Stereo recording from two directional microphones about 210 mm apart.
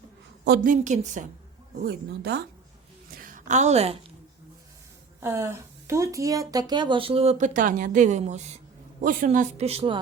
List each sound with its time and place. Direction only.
0.4 s a woman's voice: 45° right (ahead or behind)
1.9 s a woman's voice: 50° right (ahead or behind)
3.2 s a sound: 40° right (ahead or behind)
5.2 s a woman's voice: 10° right (ahead or behind); by 10.0 s 25° right (ahead or behind)